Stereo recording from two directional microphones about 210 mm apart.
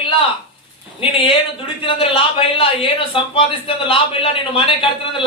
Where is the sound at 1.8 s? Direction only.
25° left (ahead or behind).